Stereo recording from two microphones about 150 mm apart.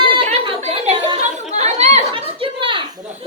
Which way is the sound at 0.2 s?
35° right (ahead or behind).